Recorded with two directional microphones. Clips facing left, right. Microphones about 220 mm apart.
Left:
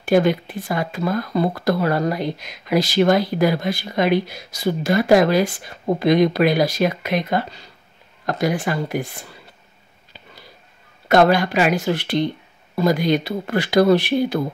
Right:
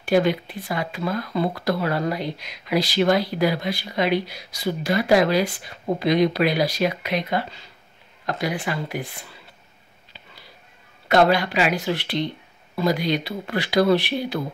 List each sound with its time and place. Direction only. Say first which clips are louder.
0.0 s speech: left 3 dB; 45° left (ahead or behind)
11.1 s speech: left 3 dB; 45° left (ahead or behind)